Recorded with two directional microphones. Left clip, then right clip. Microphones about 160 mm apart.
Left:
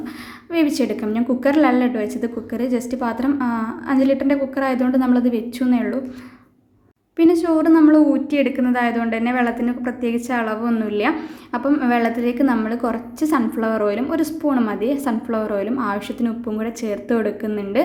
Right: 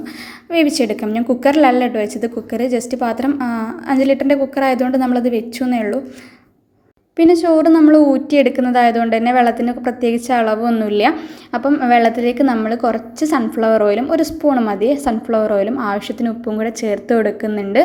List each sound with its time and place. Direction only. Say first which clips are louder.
0.5 s a woman's voice: right 4 dB; 10° right (ahead or behind)
7.2 s a woman's voice: right 5 dB; 15° right (ahead or behind)